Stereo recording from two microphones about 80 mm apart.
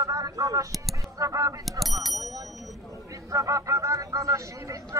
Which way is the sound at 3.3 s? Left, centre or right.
Right.